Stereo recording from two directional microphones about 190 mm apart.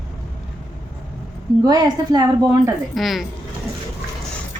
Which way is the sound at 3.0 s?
Centre (ahead or behind).